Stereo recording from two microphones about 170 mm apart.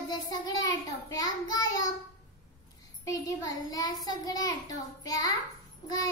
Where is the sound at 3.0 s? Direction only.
20° left (ahead or behind).